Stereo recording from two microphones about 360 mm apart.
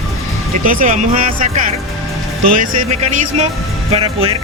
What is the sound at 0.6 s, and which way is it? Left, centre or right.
Speech, right.